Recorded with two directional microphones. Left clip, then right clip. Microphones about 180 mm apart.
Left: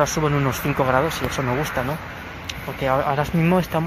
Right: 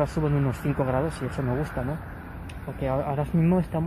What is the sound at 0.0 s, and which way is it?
Speech, centre (ahead or behind).